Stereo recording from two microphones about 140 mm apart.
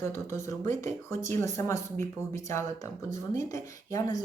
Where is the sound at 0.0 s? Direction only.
20° left (ahead or behind).